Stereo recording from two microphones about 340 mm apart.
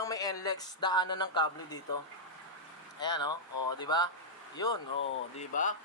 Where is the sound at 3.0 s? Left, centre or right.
Centre.